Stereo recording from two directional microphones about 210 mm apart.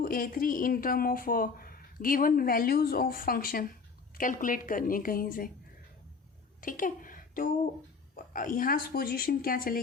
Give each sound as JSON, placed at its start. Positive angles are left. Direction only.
{"t": 0.0, "sound": "a woman's voice", "side_deg": 40}
{"t": 6.6, "sound": "a sound", "side_deg": 40}
{"t": 8.1, "sound": "speech", "side_deg": 40}